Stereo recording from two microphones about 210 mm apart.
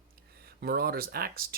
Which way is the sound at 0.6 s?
45° right (ahead or behind).